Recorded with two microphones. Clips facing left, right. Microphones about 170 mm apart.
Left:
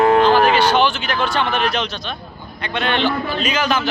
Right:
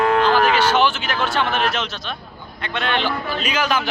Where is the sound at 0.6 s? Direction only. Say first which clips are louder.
Left 2 dB; 5° right (ahead or behind).